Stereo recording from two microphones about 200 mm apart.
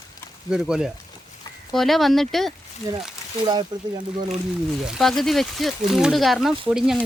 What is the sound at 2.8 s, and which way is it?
Speech, 20° right (ahead or behind).